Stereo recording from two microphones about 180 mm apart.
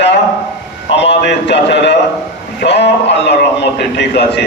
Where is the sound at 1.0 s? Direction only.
75° left (ahead or behind).